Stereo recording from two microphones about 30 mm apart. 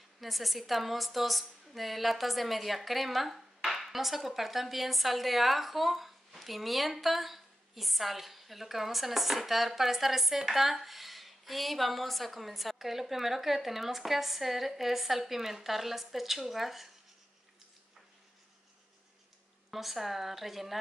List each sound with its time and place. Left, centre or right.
0.2 s a woman's voice: centre
19.7 s a woman's voice: centre